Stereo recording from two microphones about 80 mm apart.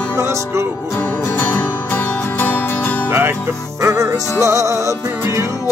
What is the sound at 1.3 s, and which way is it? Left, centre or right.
Music, left.